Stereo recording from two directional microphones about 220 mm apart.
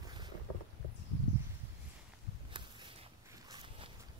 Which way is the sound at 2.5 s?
20° right (ahead or behind).